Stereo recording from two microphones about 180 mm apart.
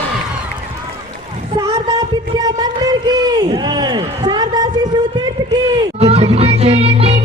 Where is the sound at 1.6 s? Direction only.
20° right (ahead or behind).